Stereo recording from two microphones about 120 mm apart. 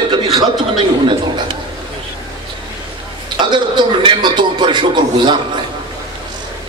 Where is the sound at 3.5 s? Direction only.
40° right (ahead or behind).